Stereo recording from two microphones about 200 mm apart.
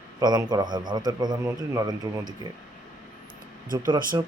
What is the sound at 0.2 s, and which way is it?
A man's voice, 20° right (ahead or behind).